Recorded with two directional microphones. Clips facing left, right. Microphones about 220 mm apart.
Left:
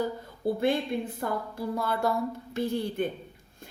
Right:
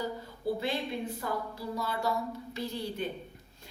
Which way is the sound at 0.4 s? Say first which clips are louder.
Left 6 dB; 55° left (ahead or behind).